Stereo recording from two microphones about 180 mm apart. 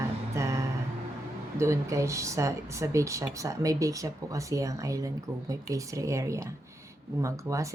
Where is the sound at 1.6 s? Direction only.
15° right (ahead or behind).